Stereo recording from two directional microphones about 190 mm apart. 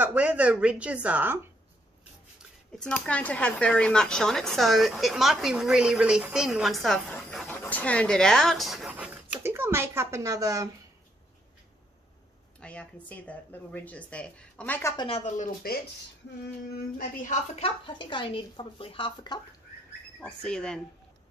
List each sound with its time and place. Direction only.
0.0 s speech: 10° right (ahead or behind)
2.8 s speech: 5° left (ahead or behind); by 10.7 s 15° right (ahead or behind)
12.5 s speech: 5° left (ahead or behind)
15.0 s speech: 35° left (ahead or behind)
17.1 s speech: 45° left (ahead or behind)
17.6 s speech: 30° left (ahead or behind)
20.2 s speech: 5° left (ahead or behind)